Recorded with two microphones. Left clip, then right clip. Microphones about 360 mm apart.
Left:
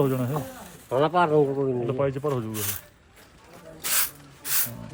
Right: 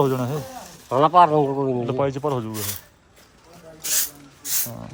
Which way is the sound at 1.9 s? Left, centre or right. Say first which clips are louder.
Right 3 dB; centre.